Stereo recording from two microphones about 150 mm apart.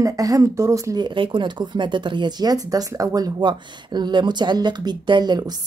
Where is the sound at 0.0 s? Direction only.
20° right (ahead or behind).